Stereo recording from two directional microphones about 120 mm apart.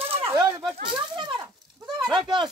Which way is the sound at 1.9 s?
Centre (ahead or behind).